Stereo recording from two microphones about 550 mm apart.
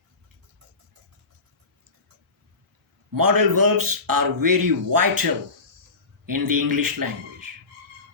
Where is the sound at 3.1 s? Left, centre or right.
Right.